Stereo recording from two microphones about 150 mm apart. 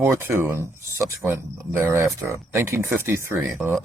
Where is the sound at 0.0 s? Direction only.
15° right (ahead or behind).